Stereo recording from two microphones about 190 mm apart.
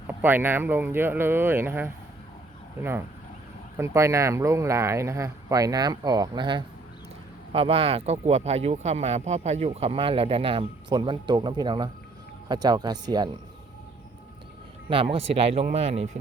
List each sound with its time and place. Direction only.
0.2 s speech: 10° right (ahead or behind)
3.8 s speech: 15° right (ahead or behind)
14.8 s speech: 30° right (ahead or behind)